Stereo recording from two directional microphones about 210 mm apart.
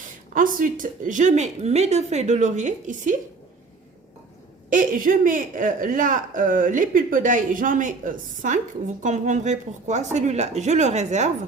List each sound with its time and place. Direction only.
0.3 s speech: 40° right (ahead or behind)
4.7 s speech: 40° right (ahead or behind)